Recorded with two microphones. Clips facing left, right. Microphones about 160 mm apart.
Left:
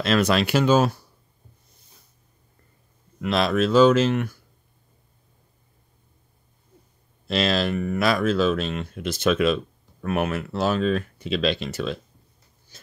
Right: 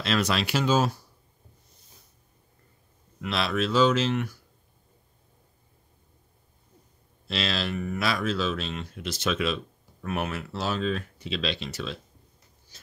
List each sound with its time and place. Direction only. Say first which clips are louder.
0.0 s speech: left 6 dB; 50° left (ahead or behind)
3.2 s speech: left 6 dB; 45° left (ahead or behind)
7.2 s speech: left 7 dB; 50° left (ahead or behind)
12.7 s a sound: left 5 dB; 50° left (ahead or behind)